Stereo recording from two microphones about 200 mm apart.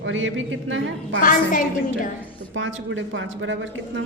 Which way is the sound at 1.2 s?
45° left (ahead or behind).